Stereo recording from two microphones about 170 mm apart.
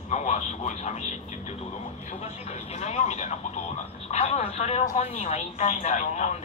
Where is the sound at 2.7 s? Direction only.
40° left (ahead or behind).